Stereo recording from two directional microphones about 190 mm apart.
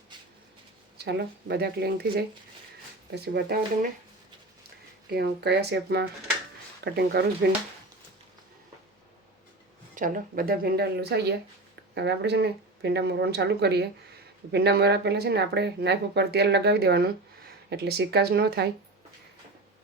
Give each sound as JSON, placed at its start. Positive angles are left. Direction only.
{"t": 0.9, "sound": "speech", "side_deg": -60}
{"t": 5.1, "sound": "speech", "side_deg": -60}
{"t": 9.9, "sound": "speech", "side_deg": -45}